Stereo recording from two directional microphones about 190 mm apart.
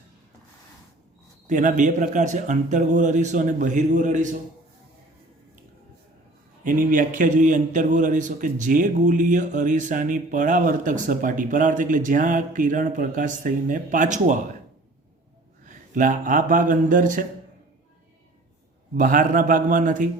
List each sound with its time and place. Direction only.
1.5 s speech: 45° right (ahead or behind)
6.7 s a man's voice: 45° right (ahead or behind)
15.6 s speech: 40° right (ahead or behind)
18.9 s a man's voice: 45° right (ahead or behind)